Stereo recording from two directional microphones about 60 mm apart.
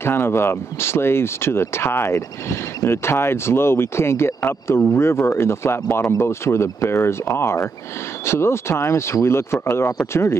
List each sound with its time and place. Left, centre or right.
0.0 s speech: left